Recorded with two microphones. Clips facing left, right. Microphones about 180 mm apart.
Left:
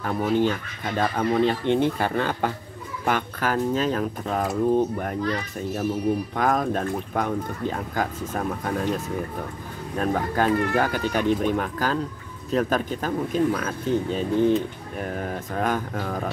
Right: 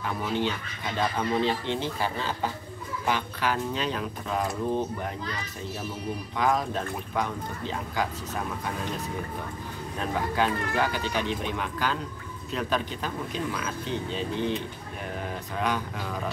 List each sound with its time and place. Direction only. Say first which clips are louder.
0.0 s speech: left 6 dB; 45° left (ahead or behind)
6.3 s speech: left 3 dB; 50° left (ahead or behind)
9.9 s speech: left 4 dB; 45° left (ahead or behind)
15.5 s speech: left 4 dB; 45° left (ahead or behind)